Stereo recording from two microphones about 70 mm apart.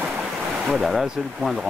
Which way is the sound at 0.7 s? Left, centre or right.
Centre.